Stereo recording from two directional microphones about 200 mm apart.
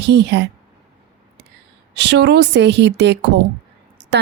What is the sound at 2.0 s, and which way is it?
A woman's voice, 60° right (ahead or behind).